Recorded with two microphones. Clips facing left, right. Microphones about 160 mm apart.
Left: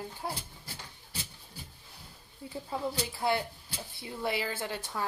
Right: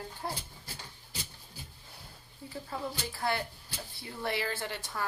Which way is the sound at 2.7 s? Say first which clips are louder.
Left 4 dB; 20° left (ahead or behind).